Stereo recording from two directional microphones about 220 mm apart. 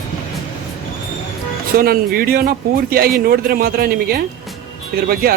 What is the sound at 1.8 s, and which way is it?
A man's voice, 40° right (ahead or behind).